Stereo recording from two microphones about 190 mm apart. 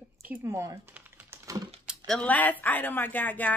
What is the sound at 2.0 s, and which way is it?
Speech, 5° left (ahead or behind).